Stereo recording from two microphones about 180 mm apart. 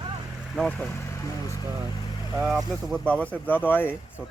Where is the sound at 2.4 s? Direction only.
Centre (ahead or behind).